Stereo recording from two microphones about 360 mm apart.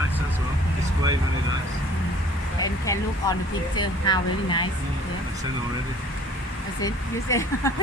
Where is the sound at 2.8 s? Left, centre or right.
Centre.